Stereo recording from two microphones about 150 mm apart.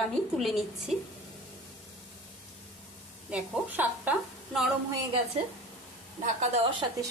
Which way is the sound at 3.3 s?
10° right (ahead or behind).